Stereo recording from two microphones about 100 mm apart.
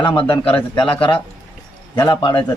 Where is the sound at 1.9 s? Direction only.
45° left (ahead or behind).